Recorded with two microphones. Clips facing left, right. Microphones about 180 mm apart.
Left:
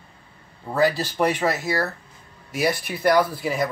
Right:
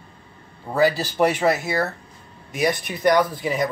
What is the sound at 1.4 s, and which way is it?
Speech, 20° right (ahead or behind).